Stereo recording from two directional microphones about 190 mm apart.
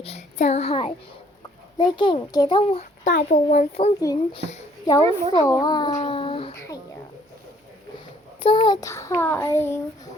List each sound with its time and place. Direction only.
0.0 s a child's voice: 35° left (ahead or behind)
3.0 s speech: 40° left (ahead or behind)
4.0 s a child's voice: 20° left (ahead or behind)
4.4 s speech: 35° left (ahead or behind)
4.9 s a child's voice: 15° left (ahead or behind)
5.9 s a sound: 35° left (ahead or behind)
8.4 s a child's voice: 25° left (ahead or behind)